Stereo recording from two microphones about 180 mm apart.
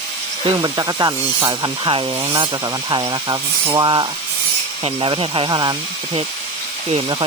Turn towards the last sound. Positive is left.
turn(degrees=-25)  # may be behind; listen again after turning